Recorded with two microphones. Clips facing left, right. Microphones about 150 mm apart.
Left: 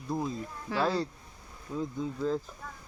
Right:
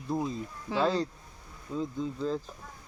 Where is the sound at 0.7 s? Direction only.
20° right (ahead or behind).